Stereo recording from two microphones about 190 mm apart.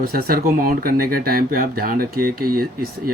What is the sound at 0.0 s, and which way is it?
Speech, 50° right (ahead or behind).